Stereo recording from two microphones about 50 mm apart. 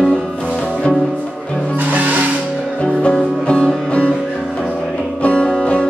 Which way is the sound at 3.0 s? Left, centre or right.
Left.